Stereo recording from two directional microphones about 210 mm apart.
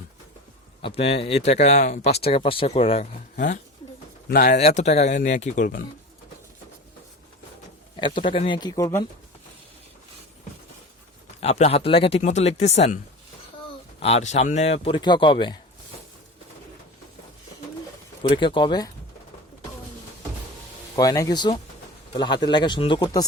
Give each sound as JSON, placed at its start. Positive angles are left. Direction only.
{"t": 0.8, "sound": "speech", "side_deg": 25}
{"t": 4.3, "sound": "speech", "side_deg": 45}
{"t": 4.6, "sound": "speech", "side_deg": 30}
{"t": 8.3, "sound": "speech", "side_deg": 25}
{"t": 11.3, "sound": "speech", "side_deg": 30}
{"t": 14.0, "sound": "speech", "side_deg": 30}
{"t": 18.2, "sound": "speech", "side_deg": 25}
{"t": 20.9, "sound": "speech", "side_deg": 15}